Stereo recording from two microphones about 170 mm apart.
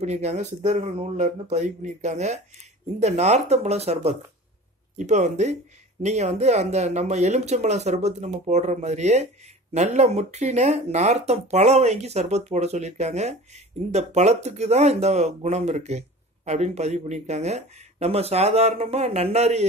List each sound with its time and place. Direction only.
0.0 s speech: 40° right (ahead or behind)